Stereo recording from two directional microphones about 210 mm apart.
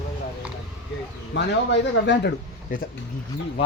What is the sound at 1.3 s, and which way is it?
Speech, 55° left (ahead or behind).